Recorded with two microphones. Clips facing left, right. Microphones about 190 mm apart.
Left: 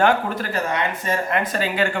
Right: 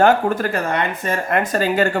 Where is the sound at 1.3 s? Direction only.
45° right (ahead or behind).